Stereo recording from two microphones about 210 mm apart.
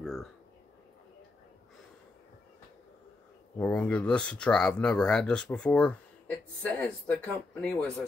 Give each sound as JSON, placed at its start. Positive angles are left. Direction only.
{"t": 3.5, "sound": "speech", "side_deg": 5}